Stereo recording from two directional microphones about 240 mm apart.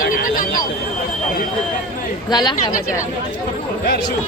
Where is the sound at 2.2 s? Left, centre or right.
Centre.